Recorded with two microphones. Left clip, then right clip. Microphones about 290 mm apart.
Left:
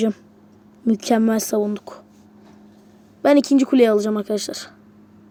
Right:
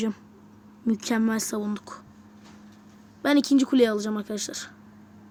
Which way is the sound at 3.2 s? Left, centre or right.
Centre.